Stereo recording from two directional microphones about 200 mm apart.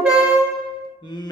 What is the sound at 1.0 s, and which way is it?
Music, 20° left (ahead or behind).